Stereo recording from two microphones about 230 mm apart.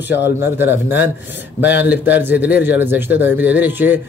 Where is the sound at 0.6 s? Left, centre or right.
Centre.